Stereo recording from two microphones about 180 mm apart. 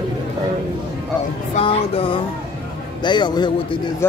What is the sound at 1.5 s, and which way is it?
Speech, 30° left (ahead or behind).